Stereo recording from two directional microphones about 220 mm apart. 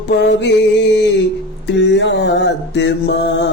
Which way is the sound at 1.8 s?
55° left (ahead or behind).